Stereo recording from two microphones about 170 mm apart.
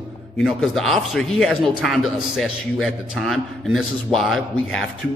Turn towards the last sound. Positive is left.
turn(degrees=0)  # may be behind; listen again after turning